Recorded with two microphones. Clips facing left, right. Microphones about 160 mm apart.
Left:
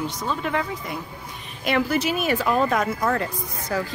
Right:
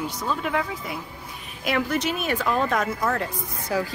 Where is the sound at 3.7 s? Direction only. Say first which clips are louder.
Right 1 dB; 10° right (ahead or behind).